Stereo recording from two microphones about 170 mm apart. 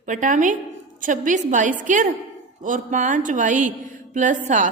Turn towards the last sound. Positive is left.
turn(degrees=-50)  # may be behind; listen again after turning